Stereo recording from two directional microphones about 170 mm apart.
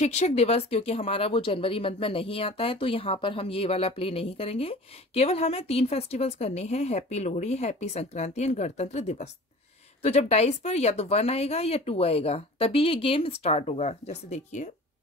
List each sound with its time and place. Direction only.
0.0 s speech: 40° left (ahead or behind)